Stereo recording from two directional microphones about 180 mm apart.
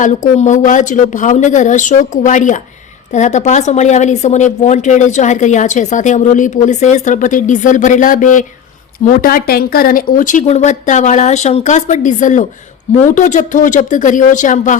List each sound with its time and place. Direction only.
0.0 s speech: 45° left (ahead or behind)